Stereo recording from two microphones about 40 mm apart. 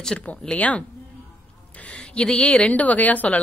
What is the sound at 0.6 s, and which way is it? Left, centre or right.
Speech, left.